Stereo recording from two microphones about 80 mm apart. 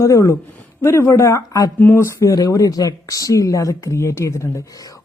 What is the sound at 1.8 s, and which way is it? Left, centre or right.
Speech, left.